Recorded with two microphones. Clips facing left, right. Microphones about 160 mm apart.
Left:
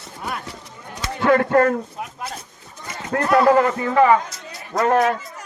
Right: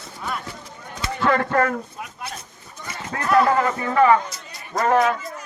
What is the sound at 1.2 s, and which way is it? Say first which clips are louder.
Speech: left 5 dB; 50° left (ahead or behind).